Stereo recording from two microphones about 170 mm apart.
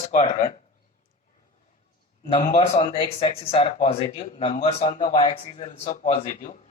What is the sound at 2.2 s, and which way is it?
Speech, 35° left (ahead or behind).